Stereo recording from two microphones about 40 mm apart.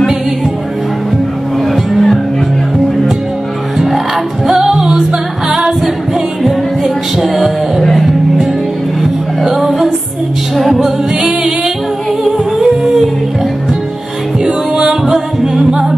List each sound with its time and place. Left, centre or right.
1.9 s music: centre
4.5 s music: centre
5.5 s a capella: centre
6.4 s music: centre
9.6 s music: centre
11.1 s music: centre
14.4 s music: centre